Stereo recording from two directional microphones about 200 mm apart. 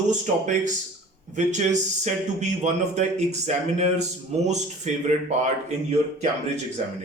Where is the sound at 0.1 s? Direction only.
40° right (ahead or behind).